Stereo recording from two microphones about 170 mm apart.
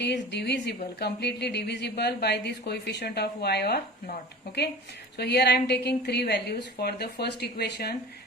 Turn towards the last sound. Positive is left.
turn(degrees=70)  # may be behind; listen again after turning